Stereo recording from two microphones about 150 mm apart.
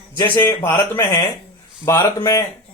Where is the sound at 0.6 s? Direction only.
20° left (ahead or behind).